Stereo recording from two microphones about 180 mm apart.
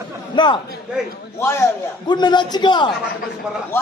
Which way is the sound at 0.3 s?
25° left (ahead or behind).